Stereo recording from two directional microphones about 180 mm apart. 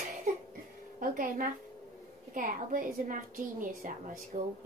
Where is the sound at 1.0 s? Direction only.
50° right (ahead or behind).